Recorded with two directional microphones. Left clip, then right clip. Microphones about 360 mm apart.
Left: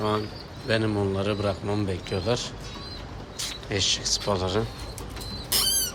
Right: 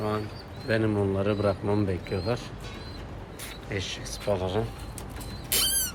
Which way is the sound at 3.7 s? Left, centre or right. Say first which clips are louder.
Left 9 dB; centre.